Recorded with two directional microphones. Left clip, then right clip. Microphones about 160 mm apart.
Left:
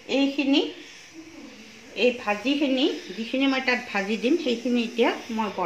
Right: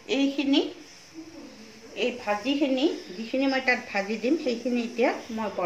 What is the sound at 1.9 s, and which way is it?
Speech, 65° left (ahead or behind).